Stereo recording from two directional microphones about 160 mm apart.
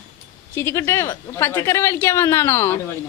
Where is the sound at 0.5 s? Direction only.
15° left (ahead or behind).